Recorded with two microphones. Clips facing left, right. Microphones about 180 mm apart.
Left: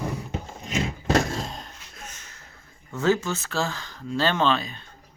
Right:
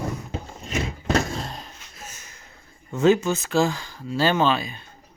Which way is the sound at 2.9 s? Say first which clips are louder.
Right 5 dB; 20° right (ahead or behind).